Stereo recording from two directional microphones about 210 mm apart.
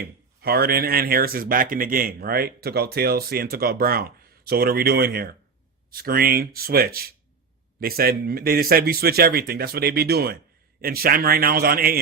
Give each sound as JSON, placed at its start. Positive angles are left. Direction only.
{"t": 0.0, "sound": "speech", "side_deg": -45}